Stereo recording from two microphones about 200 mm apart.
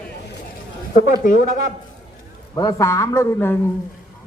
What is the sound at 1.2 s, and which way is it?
Speech, 40° left (ahead or behind).